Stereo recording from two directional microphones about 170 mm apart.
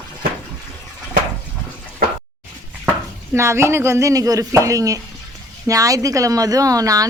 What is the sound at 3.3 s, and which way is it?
Speech, 15° right (ahead or behind).